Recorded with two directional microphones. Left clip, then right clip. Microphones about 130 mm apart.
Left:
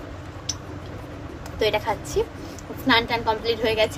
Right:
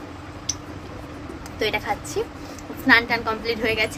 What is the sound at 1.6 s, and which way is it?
A woman's voice, 10° right (ahead or behind).